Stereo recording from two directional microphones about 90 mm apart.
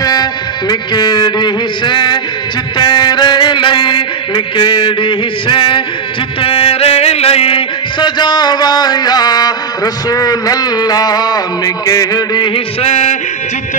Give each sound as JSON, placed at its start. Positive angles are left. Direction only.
{"t": 0.0, "sound": "music", "side_deg": 45}
{"t": 4.6, "sound": "a sound", "side_deg": 60}
{"t": 6.4, "sound": "music", "side_deg": 90}
{"t": 10.0, "sound": "a man's voice", "side_deg": 45}